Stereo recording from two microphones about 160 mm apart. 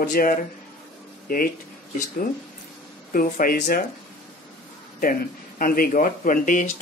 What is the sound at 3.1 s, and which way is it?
Speech, 65° left (ahead or behind).